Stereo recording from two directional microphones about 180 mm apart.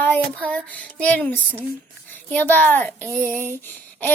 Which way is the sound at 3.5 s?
10° left (ahead or behind).